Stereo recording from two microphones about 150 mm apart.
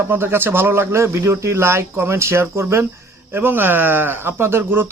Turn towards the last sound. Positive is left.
turn(degrees=-15)  # may be behind; listen again after turning